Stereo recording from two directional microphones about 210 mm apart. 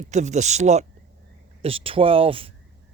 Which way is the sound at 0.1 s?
35° right (ahead or behind).